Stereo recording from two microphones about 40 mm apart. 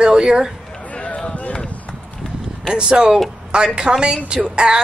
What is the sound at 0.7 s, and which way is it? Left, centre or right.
Run, left.